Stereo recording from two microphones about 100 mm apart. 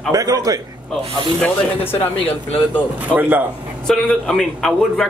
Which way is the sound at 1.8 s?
20° left (ahead or behind).